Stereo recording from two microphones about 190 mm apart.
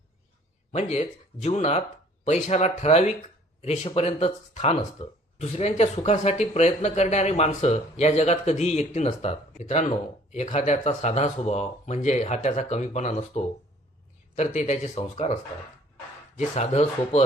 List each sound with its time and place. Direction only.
0.7 s speech: 35° left (ahead or behind)
16.4 s speech: 35° left (ahead or behind)